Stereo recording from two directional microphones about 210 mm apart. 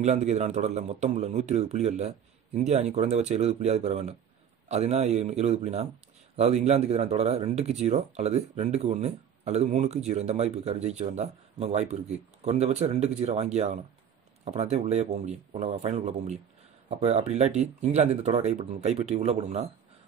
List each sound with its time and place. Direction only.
0.0 s speech: 35° right (ahead or behind)